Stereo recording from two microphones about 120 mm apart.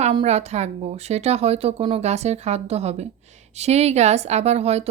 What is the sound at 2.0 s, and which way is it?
Speech, 65° right (ahead or behind).